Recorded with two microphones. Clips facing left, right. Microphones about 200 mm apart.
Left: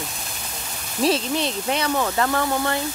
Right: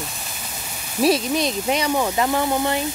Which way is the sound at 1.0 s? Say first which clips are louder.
Right 3 dB; 10° right (ahead or behind).